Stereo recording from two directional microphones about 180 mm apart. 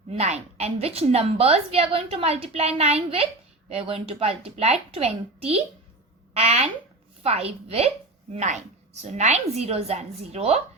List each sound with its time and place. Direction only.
0.1 s a woman's voice: 35° right (ahead or behind)